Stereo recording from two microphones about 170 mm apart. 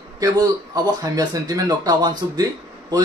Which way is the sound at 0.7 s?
20° right (ahead or behind).